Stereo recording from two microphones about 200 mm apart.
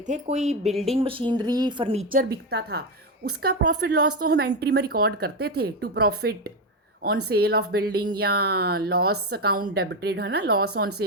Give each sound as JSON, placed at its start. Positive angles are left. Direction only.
{"t": 0.0, "sound": "speech", "side_deg": -35}
{"t": 2.1, "sound": "a woman's voice", "side_deg": -55}
{"t": 4.2, "sound": "speech", "side_deg": -55}